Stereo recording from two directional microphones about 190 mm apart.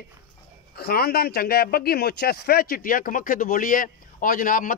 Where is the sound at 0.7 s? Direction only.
55° left (ahead or behind).